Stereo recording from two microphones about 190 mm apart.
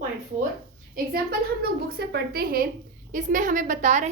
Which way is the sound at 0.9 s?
50° right (ahead or behind).